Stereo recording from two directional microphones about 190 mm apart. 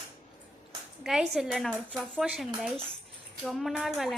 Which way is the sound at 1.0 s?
Centre (ahead or behind).